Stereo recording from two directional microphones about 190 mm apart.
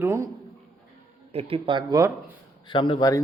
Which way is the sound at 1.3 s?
25° right (ahead or behind).